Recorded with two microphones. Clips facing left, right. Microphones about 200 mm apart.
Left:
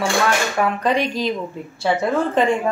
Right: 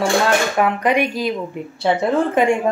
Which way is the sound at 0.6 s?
15° right (ahead or behind).